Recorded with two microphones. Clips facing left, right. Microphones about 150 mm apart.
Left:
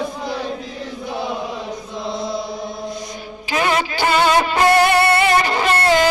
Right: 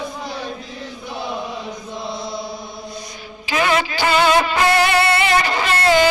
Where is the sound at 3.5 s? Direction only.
45° left (ahead or behind).